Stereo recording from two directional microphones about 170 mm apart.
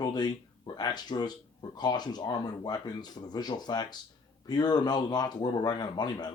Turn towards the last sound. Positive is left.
turn(degrees=25)  # may be behind; listen again after turning